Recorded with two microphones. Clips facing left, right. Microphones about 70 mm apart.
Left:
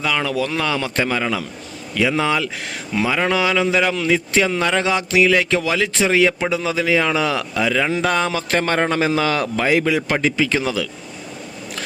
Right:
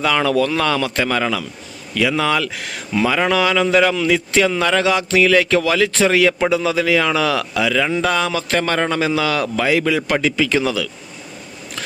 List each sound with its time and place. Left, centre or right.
0.0 s speech: centre
0.8 s speech: left
3.9 s a man's voice: left